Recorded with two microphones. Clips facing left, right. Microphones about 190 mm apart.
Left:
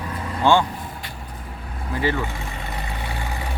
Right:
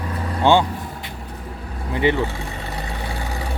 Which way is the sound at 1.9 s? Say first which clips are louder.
Right 4 dB; 20° right (ahead or behind).